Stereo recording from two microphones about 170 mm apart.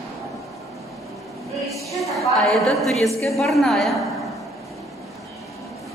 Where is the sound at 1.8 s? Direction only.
Centre (ahead or behind).